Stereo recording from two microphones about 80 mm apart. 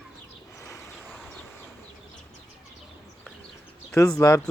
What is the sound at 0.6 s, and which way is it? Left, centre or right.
Vehicle, left.